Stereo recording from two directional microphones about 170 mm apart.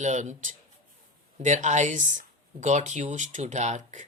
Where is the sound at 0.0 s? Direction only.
45° right (ahead or behind).